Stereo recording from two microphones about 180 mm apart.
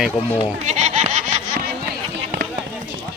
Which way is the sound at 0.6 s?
40° right (ahead or behind).